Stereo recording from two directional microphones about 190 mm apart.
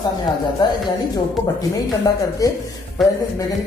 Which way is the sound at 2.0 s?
20° left (ahead or behind).